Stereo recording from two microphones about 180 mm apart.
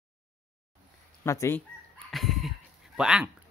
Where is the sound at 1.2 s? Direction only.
15° left (ahead or behind).